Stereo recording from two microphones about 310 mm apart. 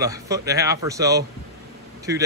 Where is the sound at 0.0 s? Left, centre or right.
Centre.